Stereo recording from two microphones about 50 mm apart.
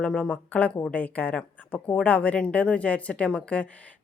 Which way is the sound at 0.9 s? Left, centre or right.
Left.